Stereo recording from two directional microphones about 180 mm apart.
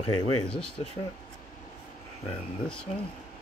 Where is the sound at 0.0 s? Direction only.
30° left (ahead or behind).